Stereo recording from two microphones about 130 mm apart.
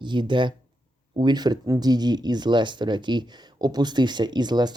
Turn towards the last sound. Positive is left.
turn(degrees=-35)  # may be behind; listen again after turning